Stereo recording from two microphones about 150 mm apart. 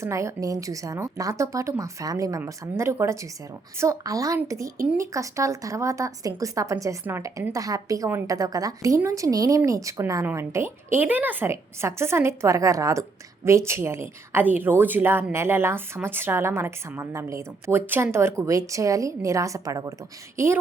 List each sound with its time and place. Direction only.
0.0 s a woman's voice: 20° right (ahead or behind)